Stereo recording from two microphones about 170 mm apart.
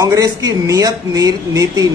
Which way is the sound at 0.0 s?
20° right (ahead or behind).